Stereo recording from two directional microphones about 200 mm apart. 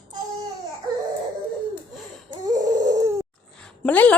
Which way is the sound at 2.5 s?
20° right (ahead or behind).